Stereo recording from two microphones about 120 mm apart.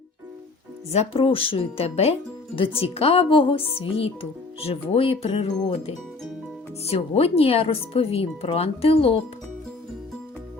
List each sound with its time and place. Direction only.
0.9 s speech: 55° left (ahead or behind)
6.8 s speech: 55° left (ahead or behind)